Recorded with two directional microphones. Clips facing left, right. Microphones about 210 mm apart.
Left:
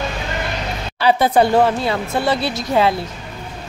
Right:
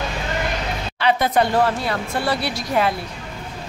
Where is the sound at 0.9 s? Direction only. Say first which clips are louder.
Left 4 dB; 30° left (ahead or behind).